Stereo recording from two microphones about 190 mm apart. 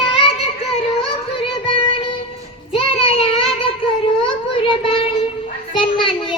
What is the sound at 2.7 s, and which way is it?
Child singing, 30° left (ahead or behind).